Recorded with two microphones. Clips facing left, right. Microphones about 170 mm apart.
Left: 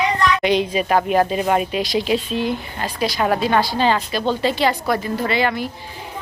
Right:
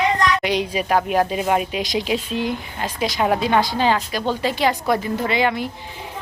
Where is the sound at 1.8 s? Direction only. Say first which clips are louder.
Left 3 dB; 15° right (ahead or behind).